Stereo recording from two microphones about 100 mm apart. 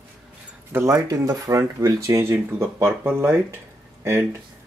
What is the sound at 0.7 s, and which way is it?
Speech, 35° right (ahead or behind).